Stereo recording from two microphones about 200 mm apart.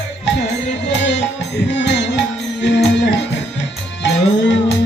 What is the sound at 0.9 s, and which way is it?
Music, 60° left (ahead or behind).